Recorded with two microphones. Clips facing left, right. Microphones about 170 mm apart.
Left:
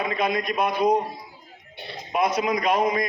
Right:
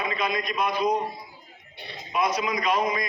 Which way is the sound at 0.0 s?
55° left (ahead or behind).